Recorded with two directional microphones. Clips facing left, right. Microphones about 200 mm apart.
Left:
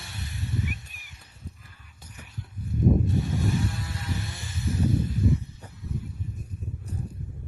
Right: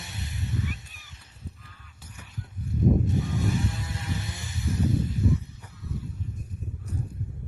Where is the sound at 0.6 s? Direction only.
20° left (ahead or behind).